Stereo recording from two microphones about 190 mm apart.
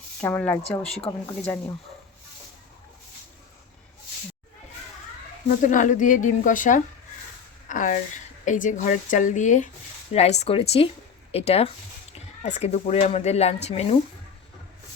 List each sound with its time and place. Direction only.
0.2 s speech: 10° left (ahead or behind)
0.9 s speech: 30° left (ahead or behind)
5.6 s a woman's voice: 40° left (ahead or behind)